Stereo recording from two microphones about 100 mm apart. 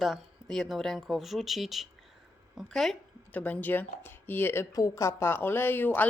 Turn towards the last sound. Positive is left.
turn(degrees=20)  # may be behind; listen again after turning